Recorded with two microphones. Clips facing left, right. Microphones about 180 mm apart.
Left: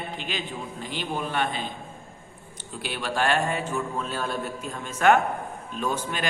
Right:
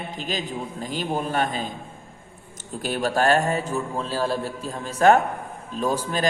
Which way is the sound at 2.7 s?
45° right (ahead or behind).